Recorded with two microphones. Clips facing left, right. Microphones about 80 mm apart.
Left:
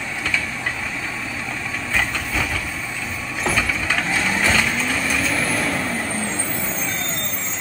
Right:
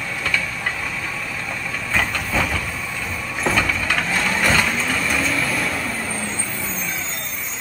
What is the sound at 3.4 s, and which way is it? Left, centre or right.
Vehicle, centre.